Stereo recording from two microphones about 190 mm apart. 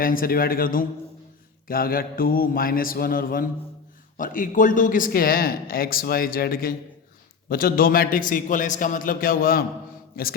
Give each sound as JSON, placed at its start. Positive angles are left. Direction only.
{"t": 0.0, "sound": "speech", "side_deg": 50}